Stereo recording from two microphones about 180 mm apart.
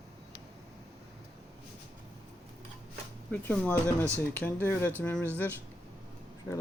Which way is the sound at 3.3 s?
10° left (ahead or behind).